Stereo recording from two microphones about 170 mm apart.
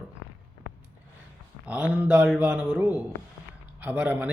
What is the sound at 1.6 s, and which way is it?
A man's voice, 5° right (ahead or behind).